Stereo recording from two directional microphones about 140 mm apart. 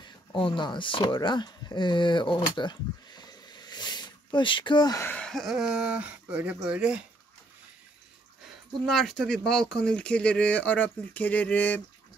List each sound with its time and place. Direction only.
0.0 s speech: 35° left (ahead or behind)
5.0 s speech: 10° left (ahead or behind); by 7.1 s 5° right (ahead or behind)
8.8 s speech: 5° left (ahead or behind)